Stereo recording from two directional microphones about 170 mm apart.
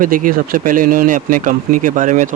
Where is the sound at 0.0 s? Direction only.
55° right (ahead or behind).